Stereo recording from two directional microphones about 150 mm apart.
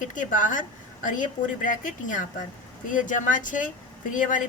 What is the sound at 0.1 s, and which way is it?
A woman's voice, 60° left (ahead or behind).